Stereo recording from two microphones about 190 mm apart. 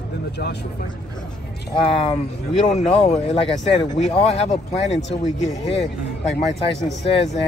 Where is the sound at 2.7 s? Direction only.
35° left (ahead or behind).